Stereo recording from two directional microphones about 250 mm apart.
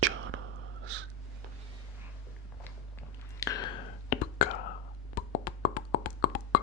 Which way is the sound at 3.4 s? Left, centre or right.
Centre.